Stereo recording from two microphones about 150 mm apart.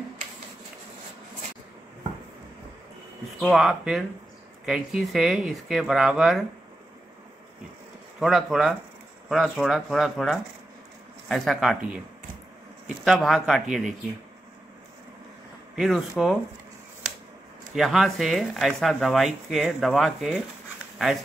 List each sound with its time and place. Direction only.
3.3 s speech: centre (ahead or behind)
8.2 s speech: centre (ahead or behind)
13.0 s speech: centre (ahead or behind)
15.7 s speech: centre (ahead or behind)
17.7 s speech: centre (ahead or behind)